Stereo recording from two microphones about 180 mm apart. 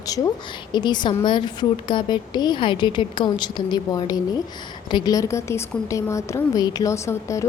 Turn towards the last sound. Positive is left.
turn(degrees=15)  # may be behind; listen again after turning